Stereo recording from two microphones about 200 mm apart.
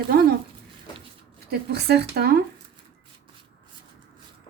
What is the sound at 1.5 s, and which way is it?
Speech, 55° right (ahead or behind).